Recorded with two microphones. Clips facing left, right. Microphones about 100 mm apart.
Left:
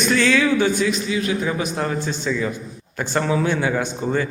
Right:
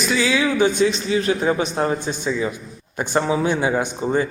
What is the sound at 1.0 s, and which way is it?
Speech, 35° right (ahead or behind).